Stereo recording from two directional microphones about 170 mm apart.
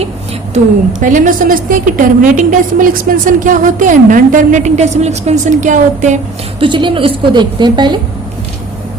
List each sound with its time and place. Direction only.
0.5 s a woman's voice: 50° right (ahead or behind)
6.6 s a woman's voice: 30° right (ahead or behind)